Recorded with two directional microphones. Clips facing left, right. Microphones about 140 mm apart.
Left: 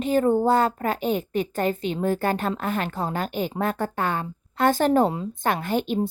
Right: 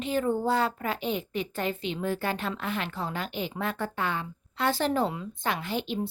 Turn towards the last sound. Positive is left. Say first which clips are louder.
# left 7 dB
turn(degrees=45)  # may be behind; listen again after turning